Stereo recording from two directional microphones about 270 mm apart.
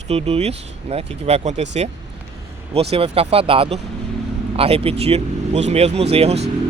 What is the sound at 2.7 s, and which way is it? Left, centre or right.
Speech, right.